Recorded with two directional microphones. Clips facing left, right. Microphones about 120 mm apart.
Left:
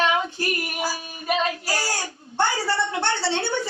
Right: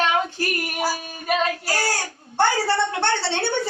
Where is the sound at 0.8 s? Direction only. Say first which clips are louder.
Right 3 dB; 35° right (ahead or behind).